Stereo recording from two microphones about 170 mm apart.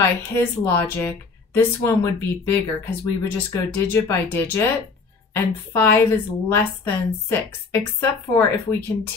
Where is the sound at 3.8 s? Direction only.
15° left (ahead or behind).